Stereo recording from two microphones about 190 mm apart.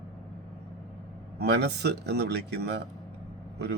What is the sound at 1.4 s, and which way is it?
Speech, 60° right (ahead or behind).